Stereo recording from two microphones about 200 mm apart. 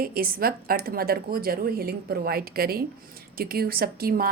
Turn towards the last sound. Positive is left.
turn(degrees=-50)  # may be behind; listen again after turning